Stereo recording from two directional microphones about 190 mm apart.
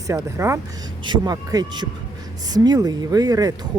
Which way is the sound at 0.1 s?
15° right (ahead or behind).